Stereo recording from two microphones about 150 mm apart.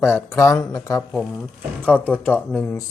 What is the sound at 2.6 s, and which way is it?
Speech, 15° left (ahead or behind).